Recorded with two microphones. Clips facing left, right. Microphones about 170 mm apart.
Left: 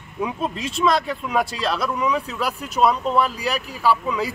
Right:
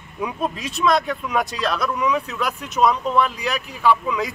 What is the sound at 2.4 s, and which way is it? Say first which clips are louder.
Speech: even; 10° left (ahead or behind).